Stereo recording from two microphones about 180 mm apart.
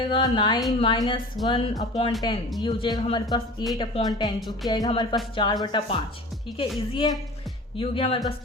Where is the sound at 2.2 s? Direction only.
25° left (ahead or behind).